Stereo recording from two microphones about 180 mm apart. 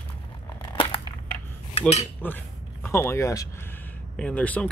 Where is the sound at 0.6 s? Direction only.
25° left (ahead or behind).